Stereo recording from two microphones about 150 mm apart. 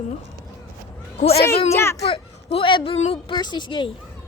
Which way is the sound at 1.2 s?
45° left (ahead or behind).